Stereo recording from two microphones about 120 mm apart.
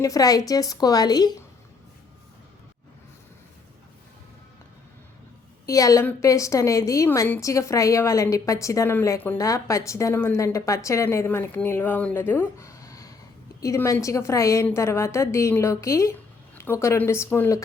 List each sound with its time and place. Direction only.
0.0 s a woman's voice: 30° left (ahead or behind)
5.6 s a woman's voice: 25° left (ahead or behind)